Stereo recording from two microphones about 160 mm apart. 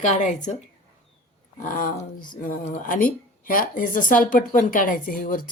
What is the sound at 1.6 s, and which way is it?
Speech, 60° left (ahead or behind).